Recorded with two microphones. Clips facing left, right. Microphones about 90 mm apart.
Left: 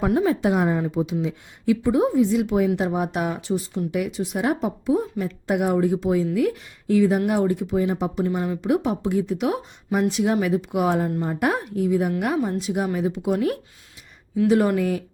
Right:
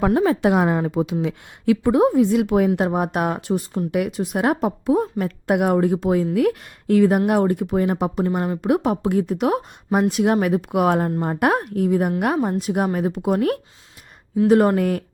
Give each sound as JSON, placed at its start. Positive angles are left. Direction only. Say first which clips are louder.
{"t": 0.0, "sound": "a woman's voice", "louder": "right 3 dB", "side_deg": -65}